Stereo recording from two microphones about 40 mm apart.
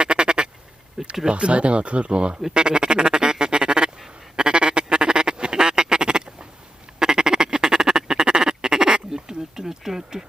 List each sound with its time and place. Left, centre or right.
0.0 s quack: right
1.0 s a sound: centre
1.3 s speech: right
2.5 s quack: right